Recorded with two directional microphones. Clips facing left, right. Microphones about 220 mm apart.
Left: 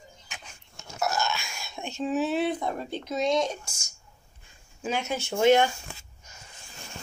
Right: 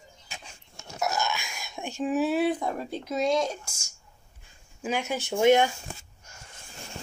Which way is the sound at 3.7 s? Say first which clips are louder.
Even; 25° right (ahead or behind).